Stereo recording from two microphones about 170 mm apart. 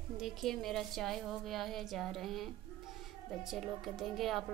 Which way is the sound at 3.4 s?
Centre (ahead or behind).